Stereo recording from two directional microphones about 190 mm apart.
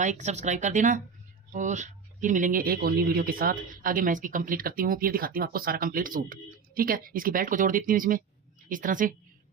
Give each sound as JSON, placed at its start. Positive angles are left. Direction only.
{"t": 0.0, "sound": "speech", "side_deg": -40}